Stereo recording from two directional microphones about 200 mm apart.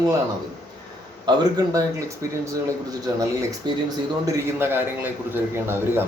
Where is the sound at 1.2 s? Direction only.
15° right (ahead or behind).